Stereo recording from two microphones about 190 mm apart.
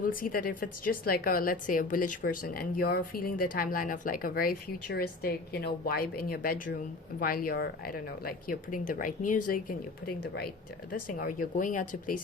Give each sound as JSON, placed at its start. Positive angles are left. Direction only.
{"t": 0.0, "sound": "speech", "side_deg": 45}
{"t": 11.1, "sound": "speech", "side_deg": 45}